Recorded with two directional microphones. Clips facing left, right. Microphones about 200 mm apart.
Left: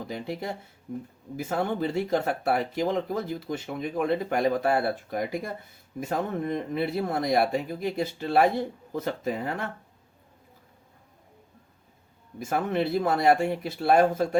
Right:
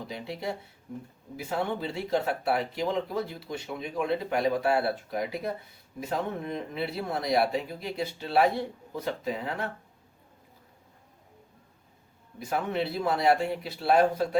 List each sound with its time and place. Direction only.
0.1 s speech: 50° left (ahead or behind)
12.4 s speech: 50° left (ahead or behind)